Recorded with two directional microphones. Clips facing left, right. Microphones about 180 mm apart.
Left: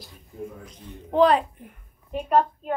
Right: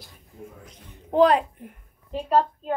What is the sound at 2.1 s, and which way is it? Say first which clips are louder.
Speech: even; 30° right (ahead or behind).